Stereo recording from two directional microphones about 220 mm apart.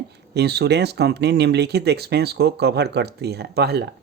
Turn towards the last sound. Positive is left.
turn(degrees=-50)  # may be behind; listen again after turning